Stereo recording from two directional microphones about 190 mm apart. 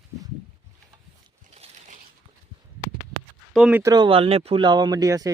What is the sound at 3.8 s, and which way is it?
Speech, 20° right (ahead or behind).